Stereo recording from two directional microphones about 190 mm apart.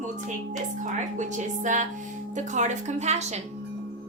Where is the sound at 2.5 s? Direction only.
40° right (ahead or behind).